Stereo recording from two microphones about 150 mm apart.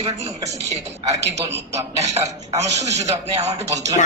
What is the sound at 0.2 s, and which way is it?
A man's voice, 50° right (ahead or behind).